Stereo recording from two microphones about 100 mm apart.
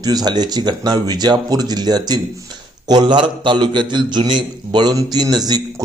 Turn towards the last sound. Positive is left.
turn(degrees=-40)  # may be behind; listen again after turning